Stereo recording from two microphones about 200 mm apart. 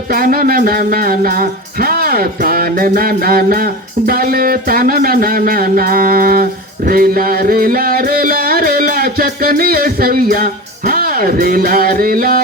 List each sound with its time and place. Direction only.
0.1 s music: 45° right (ahead or behind)